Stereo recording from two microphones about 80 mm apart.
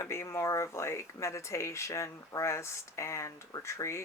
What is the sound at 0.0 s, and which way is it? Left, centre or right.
Speech, left.